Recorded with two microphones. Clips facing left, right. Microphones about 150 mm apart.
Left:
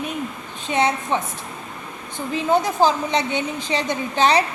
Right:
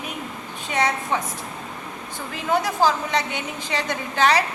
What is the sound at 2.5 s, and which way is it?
A woman's voice, 20° left (ahead or behind).